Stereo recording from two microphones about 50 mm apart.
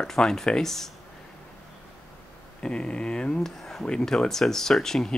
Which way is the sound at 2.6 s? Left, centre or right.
Centre.